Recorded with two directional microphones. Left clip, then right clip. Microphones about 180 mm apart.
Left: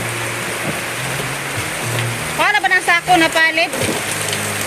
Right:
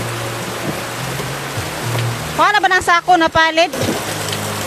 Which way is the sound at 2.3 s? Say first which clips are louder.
Right 2 dB; 30° right (ahead or behind).